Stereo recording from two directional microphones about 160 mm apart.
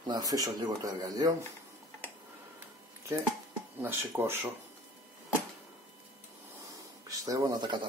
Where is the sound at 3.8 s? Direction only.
15° right (ahead or behind).